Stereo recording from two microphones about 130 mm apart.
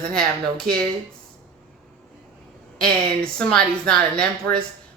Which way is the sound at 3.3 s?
5° left (ahead or behind).